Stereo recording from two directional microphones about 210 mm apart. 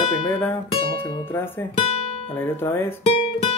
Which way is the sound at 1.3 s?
10° left (ahead or behind).